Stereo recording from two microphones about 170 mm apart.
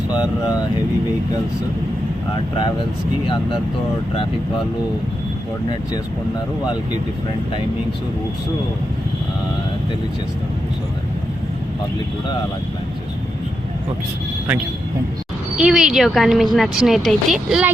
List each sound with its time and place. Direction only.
0.1 s speech: 25° left (ahead or behind)
3.2 s speech: 30° left (ahead or behind)
15.5 s speech: 5° right (ahead or behind)